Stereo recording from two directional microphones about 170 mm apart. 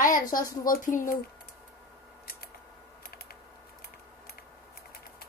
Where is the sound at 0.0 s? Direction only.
50° left (ahead or behind).